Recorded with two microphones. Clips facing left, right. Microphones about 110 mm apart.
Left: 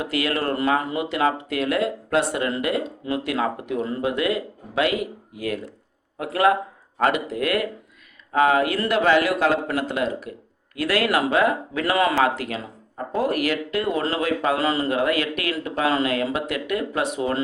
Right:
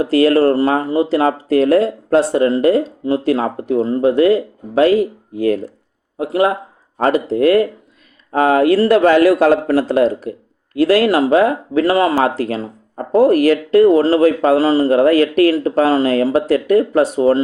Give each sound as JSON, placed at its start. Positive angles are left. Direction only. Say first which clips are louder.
{"t": 0.0, "sound": "speech", "louder": "right 13 dB", "side_deg": -35}